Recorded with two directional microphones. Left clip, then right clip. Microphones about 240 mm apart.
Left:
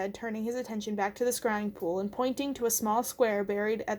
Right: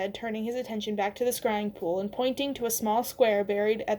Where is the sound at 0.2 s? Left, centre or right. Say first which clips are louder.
Right 2 dB; left.